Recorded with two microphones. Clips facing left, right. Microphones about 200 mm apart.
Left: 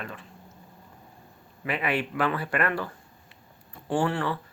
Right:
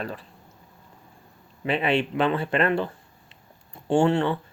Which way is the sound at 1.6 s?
25° right (ahead or behind).